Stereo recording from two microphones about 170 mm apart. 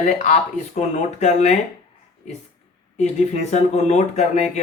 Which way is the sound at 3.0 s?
45° left (ahead or behind).